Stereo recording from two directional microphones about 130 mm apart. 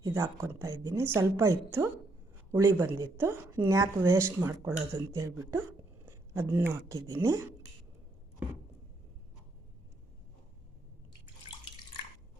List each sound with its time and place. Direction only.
0.1 s speech: 20° right (ahead or behind)